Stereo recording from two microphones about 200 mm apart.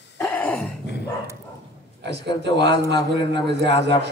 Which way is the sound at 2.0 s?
60° right (ahead or behind).